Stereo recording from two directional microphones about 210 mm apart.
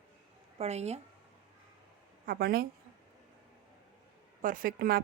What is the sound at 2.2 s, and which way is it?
Speech, 45° right (ahead or behind).